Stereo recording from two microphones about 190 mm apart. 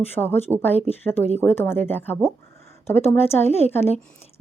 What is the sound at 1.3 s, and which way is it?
Speech, 10° left (ahead or behind).